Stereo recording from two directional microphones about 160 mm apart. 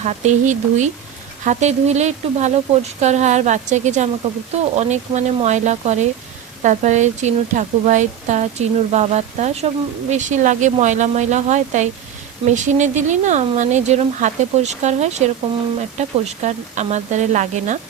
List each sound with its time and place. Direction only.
0.0 s a woman's voice: 45° right (ahead or behind)